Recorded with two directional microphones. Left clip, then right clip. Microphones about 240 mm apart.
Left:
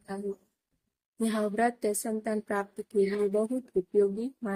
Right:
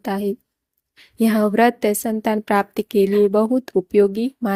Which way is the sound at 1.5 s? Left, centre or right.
Right.